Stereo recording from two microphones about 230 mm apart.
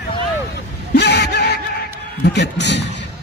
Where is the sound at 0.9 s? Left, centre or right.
Left.